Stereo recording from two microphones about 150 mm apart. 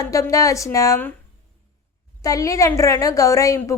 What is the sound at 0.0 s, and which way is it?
A woman's voice, 20° left (ahead or behind).